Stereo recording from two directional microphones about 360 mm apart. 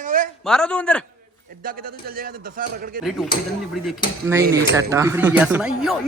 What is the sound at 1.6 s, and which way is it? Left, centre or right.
A man's voice, right.